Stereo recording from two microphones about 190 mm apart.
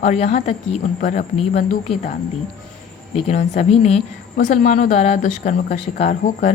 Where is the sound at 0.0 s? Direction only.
35° left (ahead or behind).